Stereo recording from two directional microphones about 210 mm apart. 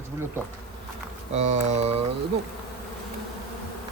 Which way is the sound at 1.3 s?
30° right (ahead or behind).